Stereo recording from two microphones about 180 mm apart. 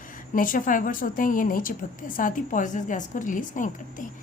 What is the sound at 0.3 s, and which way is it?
A woman's voice, 50° left (ahead or behind).